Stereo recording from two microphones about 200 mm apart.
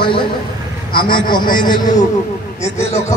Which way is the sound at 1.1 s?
25° left (ahead or behind).